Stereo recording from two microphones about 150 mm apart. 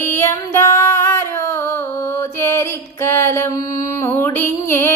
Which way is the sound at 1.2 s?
15° left (ahead or behind).